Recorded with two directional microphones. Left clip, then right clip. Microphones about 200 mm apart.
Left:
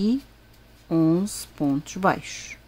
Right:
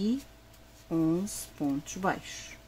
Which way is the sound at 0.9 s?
25° left (ahead or behind).